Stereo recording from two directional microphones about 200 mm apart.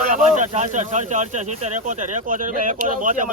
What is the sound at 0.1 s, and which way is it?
Speech, 35° right (ahead or behind).